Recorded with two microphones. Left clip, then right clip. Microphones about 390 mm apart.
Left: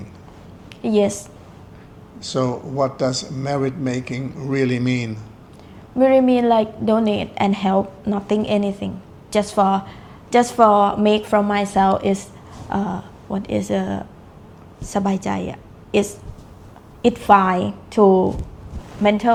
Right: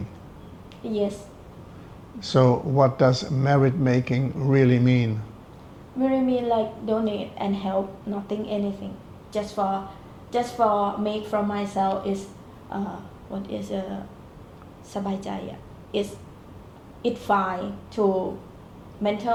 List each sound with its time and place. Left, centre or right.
0.9 s a woman's voice: left
2.2 s a man's voice: right
6.0 s a woman's voice: left
17.0 s a woman's voice: left
19.0 s a woman's voice: left